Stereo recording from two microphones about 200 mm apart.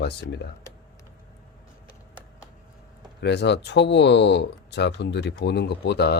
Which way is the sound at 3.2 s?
60° left (ahead or behind).